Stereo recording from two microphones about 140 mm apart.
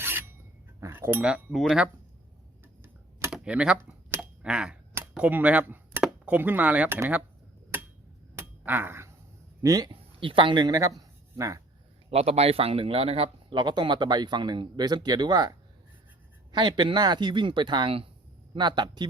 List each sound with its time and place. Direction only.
0.0 s filing: 15° right (ahead or behind)
0.8 s speech: 15° right (ahead or behind)
2.8 s typing: 15° right (ahead or behind)
3.3 s computer keyboard: 5° right (ahead or behind)
4.9 s speech: 10° right (ahead or behind)
8.4 s finger snapping: 15° right (ahead or behind)
9.6 s speech: 25° right (ahead or behind)
9.9 s speech: 40° right (ahead or behind)
12.1 s speech: 50° right (ahead or behind); by 19.0 s 30° right (ahead or behind)